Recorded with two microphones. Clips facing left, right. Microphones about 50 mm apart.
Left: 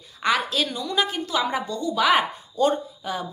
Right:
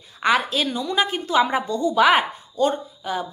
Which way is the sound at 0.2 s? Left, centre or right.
Centre.